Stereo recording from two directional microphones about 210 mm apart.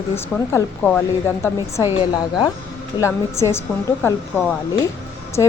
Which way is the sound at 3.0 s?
15° left (ahead or behind).